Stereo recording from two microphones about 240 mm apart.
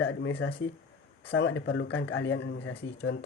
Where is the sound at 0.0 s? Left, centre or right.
Left.